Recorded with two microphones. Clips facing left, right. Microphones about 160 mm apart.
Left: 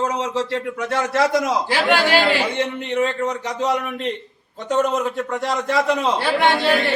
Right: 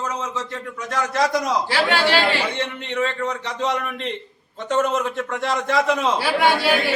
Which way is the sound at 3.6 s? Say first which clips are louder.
Left 3 dB; 5° left (ahead or behind).